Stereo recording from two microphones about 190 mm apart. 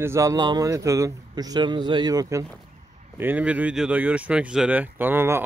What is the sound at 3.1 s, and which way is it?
Speech, 10° right (ahead or behind).